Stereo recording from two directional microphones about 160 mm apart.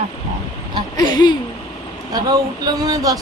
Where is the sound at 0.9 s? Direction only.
25° left (ahead or behind).